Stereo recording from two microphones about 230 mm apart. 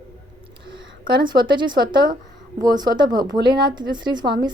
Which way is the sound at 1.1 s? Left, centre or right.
Centre.